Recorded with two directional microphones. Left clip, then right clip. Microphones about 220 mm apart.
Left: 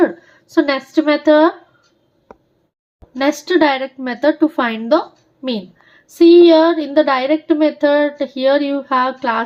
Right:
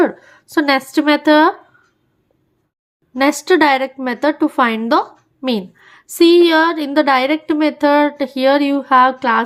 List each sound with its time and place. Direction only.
0.0 s a woman's voice: 25° right (ahead or behind)
3.2 s speech: 30° right (ahead or behind)